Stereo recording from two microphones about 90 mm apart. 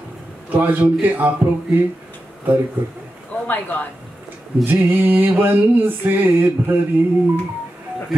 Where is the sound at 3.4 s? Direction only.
20° left (ahead or behind).